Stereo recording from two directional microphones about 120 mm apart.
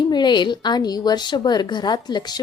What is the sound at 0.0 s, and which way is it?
A woman's voice, 40° left (ahead or behind).